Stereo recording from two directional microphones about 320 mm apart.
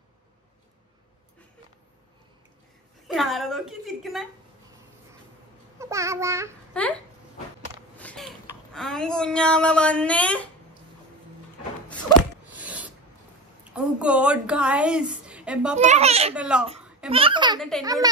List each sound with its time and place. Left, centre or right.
3.1 s a woman's voice: centre
5.8 s babbling: centre
6.7 s speech: centre
8.0 s a sound: centre
8.7 s a woman's voice: centre
12.4 s a sound: centre
13.7 s a woman's voice: centre
15.8 s a child's voice: right
16.3 s a woman's voice: centre
17.1 s a child's voice: centre
17.6 s a woman's voice: centre